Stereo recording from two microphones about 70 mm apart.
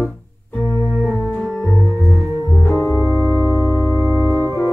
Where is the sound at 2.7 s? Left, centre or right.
Left.